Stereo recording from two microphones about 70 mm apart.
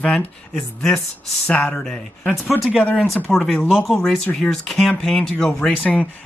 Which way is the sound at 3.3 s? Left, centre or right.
Centre.